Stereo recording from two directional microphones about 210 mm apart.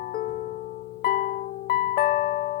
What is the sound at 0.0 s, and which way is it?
Music, 45° left (ahead or behind).